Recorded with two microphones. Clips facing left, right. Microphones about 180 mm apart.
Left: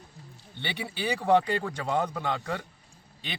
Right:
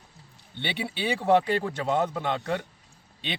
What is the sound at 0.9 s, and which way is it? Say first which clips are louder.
A man's voice: right 1 dB; 20° right (ahead or behind).